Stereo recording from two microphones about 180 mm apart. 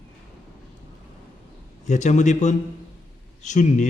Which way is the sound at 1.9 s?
40° left (ahead or behind).